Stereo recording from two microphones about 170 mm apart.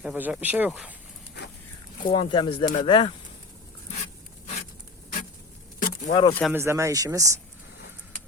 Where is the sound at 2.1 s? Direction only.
30° left (ahead or behind).